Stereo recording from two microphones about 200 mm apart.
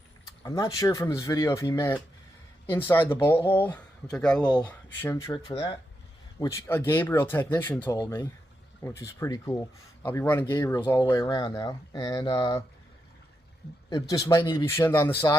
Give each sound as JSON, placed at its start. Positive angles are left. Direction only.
{"t": 0.4, "sound": "speech", "side_deg": 20}
{"t": 13.9, "sound": "speech", "side_deg": 20}